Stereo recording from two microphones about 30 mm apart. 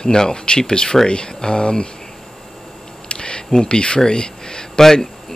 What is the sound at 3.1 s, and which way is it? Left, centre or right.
Camera, left.